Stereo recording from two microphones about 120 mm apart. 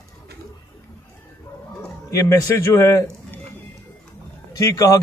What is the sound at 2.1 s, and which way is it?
A man's voice, 25° left (ahead or behind).